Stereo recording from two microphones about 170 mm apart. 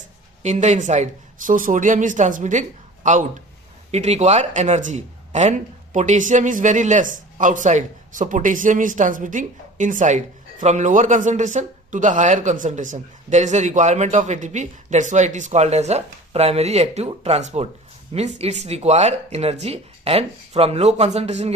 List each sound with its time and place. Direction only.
0.4 s speech: 45° right (ahead or behind)